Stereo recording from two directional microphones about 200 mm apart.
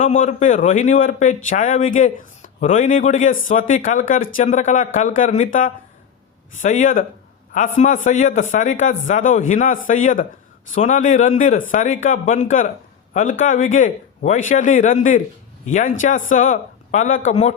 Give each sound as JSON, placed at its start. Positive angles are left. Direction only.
{"t": 0.0, "sound": "speech", "side_deg": 35}